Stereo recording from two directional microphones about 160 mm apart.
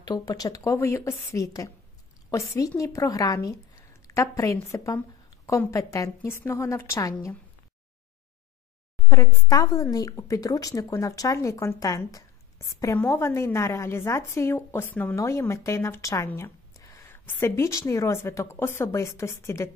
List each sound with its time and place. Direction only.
0.0 s a woman's voice: 25° left (ahead or behind)
9.1 s a woman's voice: 20° left (ahead or behind)